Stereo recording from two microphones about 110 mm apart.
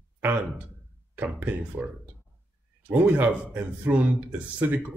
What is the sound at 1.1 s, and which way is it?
Speech, 15° right (ahead or behind).